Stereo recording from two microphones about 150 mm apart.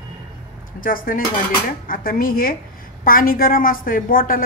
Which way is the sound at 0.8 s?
70° left (ahead or behind).